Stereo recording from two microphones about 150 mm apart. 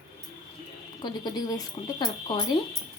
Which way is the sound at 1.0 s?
25° left (ahead or behind).